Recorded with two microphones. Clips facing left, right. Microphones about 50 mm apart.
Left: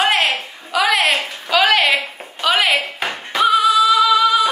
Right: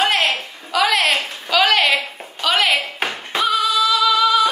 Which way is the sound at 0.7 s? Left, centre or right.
Centre.